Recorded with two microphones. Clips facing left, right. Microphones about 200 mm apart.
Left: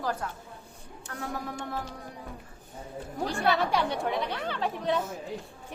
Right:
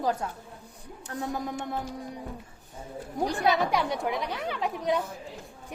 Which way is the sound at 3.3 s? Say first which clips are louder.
Right 1 dB; 20° right (ahead or behind).